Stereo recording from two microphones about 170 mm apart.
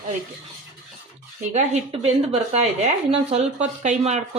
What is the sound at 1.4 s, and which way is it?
Speech, 40° right (ahead or behind).